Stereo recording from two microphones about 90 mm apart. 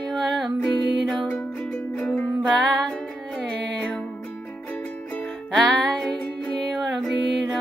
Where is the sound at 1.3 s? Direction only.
20° left (ahead or behind).